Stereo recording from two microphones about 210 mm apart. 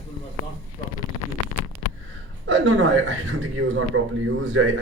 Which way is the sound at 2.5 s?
65° right (ahead or behind).